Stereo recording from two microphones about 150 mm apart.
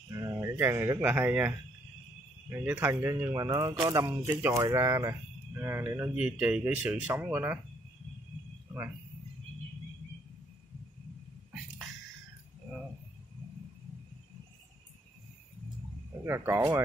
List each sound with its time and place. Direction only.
0.1 s speech: 20° right (ahead or behind)
2.5 s speech: 10° right (ahead or behind)
16.3 s speech: 20° right (ahead or behind)